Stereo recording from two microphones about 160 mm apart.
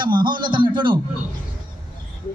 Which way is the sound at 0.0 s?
30° right (ahead or behind).